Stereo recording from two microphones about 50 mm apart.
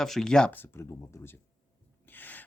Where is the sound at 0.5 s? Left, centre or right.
Left.